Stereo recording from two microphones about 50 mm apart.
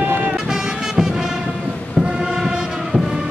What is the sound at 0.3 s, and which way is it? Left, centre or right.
Music, centre.